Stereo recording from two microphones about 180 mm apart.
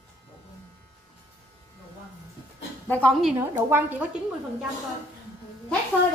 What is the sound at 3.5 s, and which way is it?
Speech, 10° right (ahead or behind).